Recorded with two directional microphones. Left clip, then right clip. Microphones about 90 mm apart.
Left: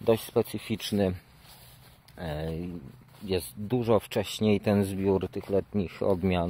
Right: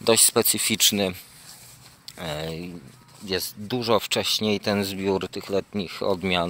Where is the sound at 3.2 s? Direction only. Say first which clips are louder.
Right 3 dB; 90° left.